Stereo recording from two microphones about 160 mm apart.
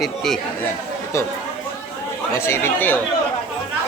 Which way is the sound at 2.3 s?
15° left (ahead or behind).